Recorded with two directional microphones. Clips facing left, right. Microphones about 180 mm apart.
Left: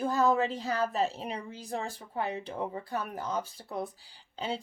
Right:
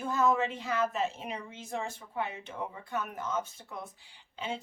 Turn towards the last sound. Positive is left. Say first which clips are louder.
# left 3 dB
turn(degrees=35)  # may be behind; listen again after turning